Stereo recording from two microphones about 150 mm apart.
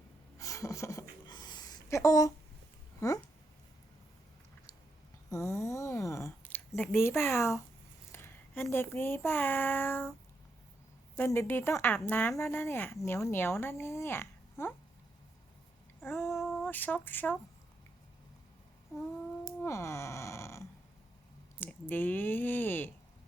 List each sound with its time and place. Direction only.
0.3 s a sound: 20° left (ahead or behind)
3.0 s speech: 20° left (ahead or behind)
5.3 s a sound: 20° left (ahead or behind)
8.7 s speech: 15° left (ahead or behind)
11.2 s speech: 15° left (ahead or behind)
16.0 s child singing: 15° left (ahead or behind)
16.2 s female singing: centre (ahead or behind)
16.6 s speech: 10° left (ahead or behind)
19.6 s a sound: 20° left (ahead or behind)
21.6 s speech: 10° left (ahead or behind)